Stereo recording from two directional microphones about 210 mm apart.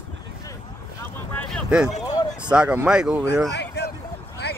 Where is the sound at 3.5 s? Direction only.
55° left (ahead or behind).